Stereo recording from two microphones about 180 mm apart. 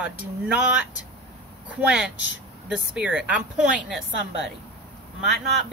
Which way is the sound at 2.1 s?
90° left.